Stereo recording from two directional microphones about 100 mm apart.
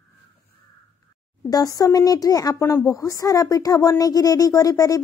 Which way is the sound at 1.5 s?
40° left (ahead or behind).